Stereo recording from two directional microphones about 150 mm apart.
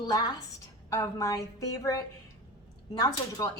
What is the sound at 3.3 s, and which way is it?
Speech, 20° left (ahead or behind).